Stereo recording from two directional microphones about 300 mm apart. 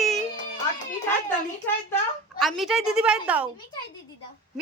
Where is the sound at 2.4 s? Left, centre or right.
Centre.